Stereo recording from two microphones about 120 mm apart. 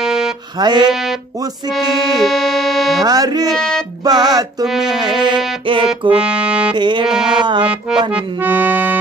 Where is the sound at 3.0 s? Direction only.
35° right (ahead or behind).